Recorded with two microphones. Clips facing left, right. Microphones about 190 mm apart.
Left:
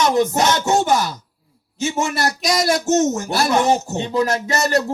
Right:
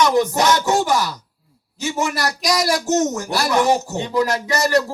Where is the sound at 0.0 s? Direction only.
25° left (ahead or behind).